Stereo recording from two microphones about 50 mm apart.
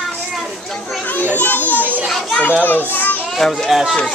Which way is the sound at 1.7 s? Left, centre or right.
Right.